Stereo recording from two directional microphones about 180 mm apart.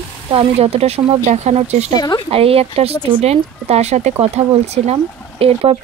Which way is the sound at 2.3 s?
35° right (ahead or behind).